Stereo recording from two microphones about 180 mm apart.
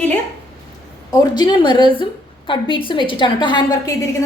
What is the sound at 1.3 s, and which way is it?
A woman's voice, 25° left (ahead or behind).